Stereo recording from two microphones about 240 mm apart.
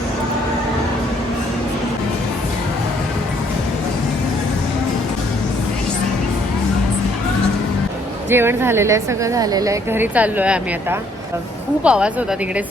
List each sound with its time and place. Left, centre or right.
8.3 s a woman's voice: centre